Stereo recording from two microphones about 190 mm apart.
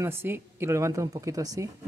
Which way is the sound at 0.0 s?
10° right (ahead or behind).